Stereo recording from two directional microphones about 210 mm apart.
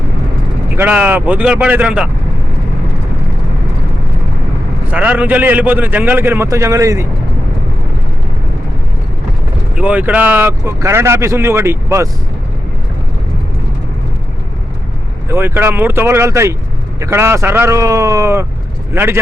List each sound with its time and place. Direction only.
0.8 s speech: 10° right (ahead or behind)
4.9 s speech: 5° right (ahead or behind)
9.7 s speech: 5° right (ahead or behind)
15.3 s speech: 10° right (ahead or behind)